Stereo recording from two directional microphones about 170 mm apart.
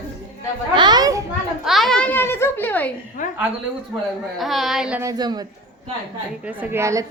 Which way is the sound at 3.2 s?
50° left (ahead or behind).